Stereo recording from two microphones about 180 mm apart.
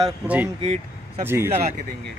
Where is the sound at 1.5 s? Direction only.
40° right (ahead or behind).